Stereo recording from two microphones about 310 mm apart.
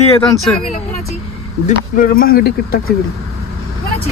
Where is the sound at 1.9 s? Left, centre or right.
Left.